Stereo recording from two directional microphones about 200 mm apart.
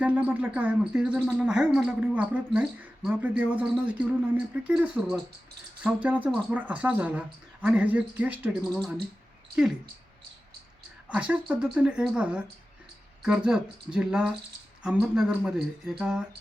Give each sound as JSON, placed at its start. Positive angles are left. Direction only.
{"t": 0.0, "sound": "speech", "side_deg": -5}
{"t": 11.1, "sound": "speech", "side_deg": -5}